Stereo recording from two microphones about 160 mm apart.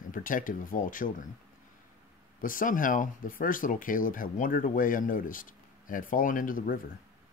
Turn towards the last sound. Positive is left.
turn(degrees=60)  # may be behind; listen again after turning